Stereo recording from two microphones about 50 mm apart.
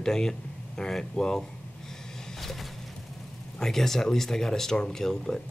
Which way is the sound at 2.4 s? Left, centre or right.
Centre.